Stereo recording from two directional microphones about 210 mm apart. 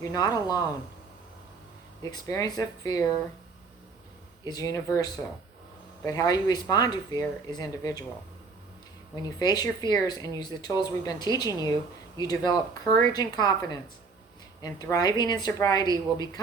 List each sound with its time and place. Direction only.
0.0 s speech: 15° left (ahead or behind)
2.0 s speech: 20° left (ahead or behind)
4.4 s speech: 15° left (ahead or behind)
9.4 s speech: 20° left (ahead or behind)